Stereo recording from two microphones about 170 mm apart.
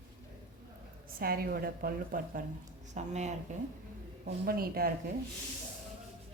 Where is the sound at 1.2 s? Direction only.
60° right (ahead or behind).